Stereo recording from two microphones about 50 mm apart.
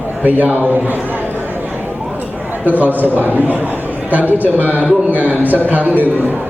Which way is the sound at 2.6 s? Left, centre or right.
Right.